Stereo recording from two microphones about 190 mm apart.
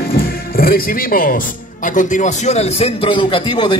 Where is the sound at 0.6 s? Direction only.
50° left (ahead or behind).